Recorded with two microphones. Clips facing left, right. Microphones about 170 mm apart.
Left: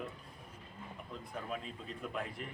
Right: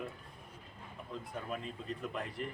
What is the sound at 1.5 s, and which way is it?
Speech, centre (ahead or behind).